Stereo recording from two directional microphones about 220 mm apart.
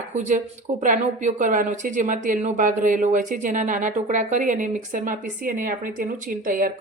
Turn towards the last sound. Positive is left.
turn(degrees=-40)  # may be behind; listen again after turning